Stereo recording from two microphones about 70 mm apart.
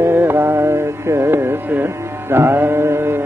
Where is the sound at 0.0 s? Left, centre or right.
Right.